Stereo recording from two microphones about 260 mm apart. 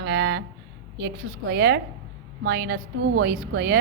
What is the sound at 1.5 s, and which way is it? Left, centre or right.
A woman's voice, right.